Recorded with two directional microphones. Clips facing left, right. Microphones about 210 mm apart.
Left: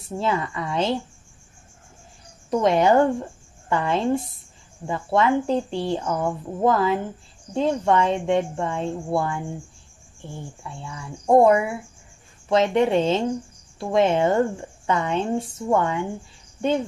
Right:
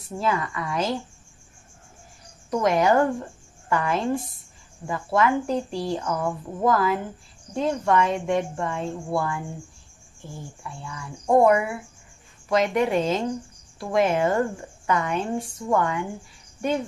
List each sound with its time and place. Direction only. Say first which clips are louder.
0.0 s a woman's voice: left 1 dB; 25° left (ahead or behind)
2.5 s a woman's voice: left 2 dB; 25° left (ahead or behind)
10.8 s a woman's voice: left 2 dB; 25° left (ahead or behind)